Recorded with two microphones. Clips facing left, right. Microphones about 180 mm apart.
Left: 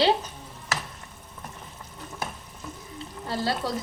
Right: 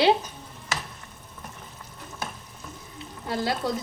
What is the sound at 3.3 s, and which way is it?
Speech, 15° right (ahead or behind).